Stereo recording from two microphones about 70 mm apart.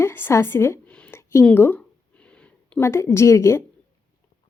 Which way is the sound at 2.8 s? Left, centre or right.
Left.